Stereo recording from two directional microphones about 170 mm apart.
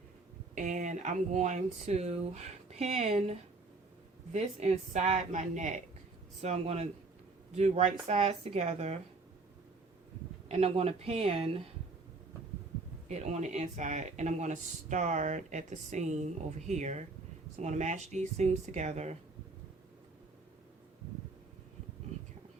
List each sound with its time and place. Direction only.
0.5 s speech: 50° right (ahead or behind)
10.5 s speech: 35° right (ahead or behind)
13.1 s speech: 40° right (ahead or behind)